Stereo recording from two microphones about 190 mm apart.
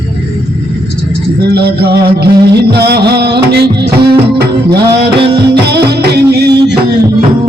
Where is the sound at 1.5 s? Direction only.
55° right (ahead or behind).